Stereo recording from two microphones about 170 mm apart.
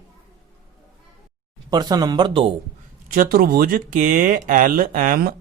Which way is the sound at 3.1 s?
55° right (ahead or behind).